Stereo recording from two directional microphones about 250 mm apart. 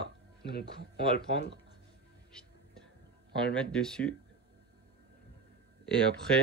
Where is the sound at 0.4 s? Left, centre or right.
Left.